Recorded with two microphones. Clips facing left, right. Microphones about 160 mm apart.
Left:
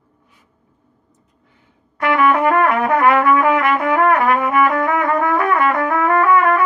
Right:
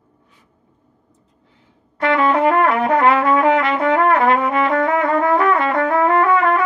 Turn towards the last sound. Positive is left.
turn(degrees=-25)  # may be behind; listen again after turning